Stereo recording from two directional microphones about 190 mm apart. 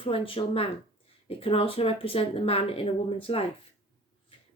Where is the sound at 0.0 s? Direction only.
30° left (ahead or behind).